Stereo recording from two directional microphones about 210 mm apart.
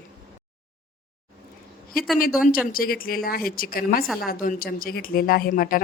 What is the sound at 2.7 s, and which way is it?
Speech, 45° left (ahead or behind).